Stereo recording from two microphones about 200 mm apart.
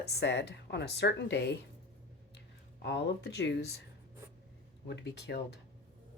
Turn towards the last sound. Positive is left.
turn(degrees=55)  # may be behind; listen again after turning